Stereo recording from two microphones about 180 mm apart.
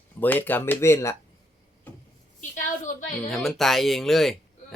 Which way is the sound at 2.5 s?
45° left (ahead or behind).